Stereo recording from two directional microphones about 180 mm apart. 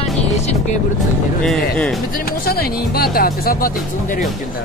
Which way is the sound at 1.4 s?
5° left (ahead or behind).